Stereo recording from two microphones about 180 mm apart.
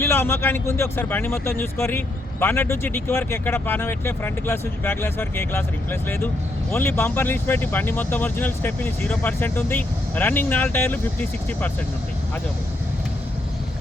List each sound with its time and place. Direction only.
0.0 s speech: 10° left (ahead or behind)